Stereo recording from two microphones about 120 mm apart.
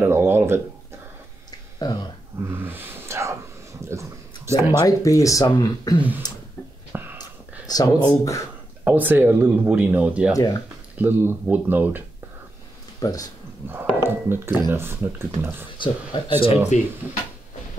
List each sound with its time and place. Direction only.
0.0 s speech: 20° right (ahead or behind)
1.8 s speech: 35° left (ahead or behind)
2.4 s speech: 20° right (ahead or behind)
3.8 s a sound: 25° right (ahead or behind)
4.8 s speech: 30° left (ahead or behind)
5.9 s speech: 15° right (ahead or behind)
6.9 s a sound: 15° right (ahead or behind)
7.6 s speech: 35° left (ahead or behind)
8.8 s speech: 15° right (ahead or behind)
10.3 s speech: 30° left (ahead or behind)
11.0 s speech: 20° right (ahead or behind)
13.0 s speech: 30° left (ahead or behind)
13.9 s speech: 20° right (ahead or behind)
15.8 s speech: 40° left (ahead or behind)